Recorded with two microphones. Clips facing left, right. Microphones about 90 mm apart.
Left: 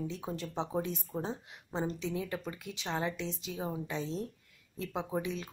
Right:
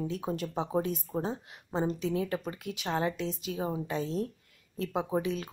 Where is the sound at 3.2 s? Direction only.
45° right (ahead or behind).